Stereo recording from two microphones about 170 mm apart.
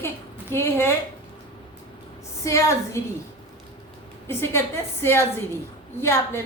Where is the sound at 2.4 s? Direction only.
15° left (ahead or behind).